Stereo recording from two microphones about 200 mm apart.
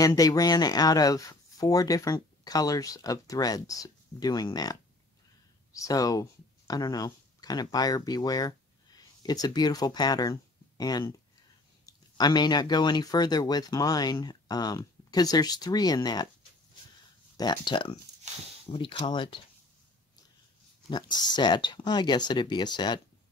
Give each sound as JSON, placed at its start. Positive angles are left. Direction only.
{"t": 0.0, "sound": "speech", "side_deg": 15}
{"t": 17.4, "sound": "speech", "side_deg": 20}
{"t": 20.9, "sound": "speech", "side_deg": 20}